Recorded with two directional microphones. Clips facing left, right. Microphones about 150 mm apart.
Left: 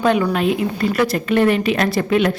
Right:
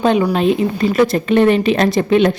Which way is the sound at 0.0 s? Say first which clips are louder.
Right 3 dB; 25° right (ahead or behind).